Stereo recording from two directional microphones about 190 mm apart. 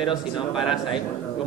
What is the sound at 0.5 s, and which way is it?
Speech, centre (ahead or behind).